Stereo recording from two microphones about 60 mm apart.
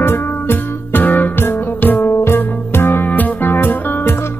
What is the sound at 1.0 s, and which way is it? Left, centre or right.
Music, left.